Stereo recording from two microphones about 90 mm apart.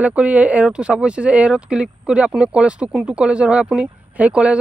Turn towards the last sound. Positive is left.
turn(degrees=-15)  # may be behind; listen again after turning